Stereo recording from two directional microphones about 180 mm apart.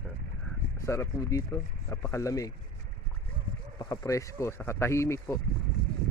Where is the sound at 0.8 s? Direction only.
15° left (ahead or behind).